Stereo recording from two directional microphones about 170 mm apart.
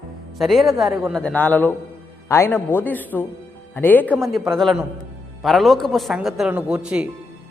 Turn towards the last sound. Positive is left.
turn(degrees=-5)  # may be behind; listen again after turning